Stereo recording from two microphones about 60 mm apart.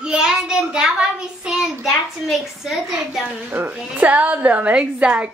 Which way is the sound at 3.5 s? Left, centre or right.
Right.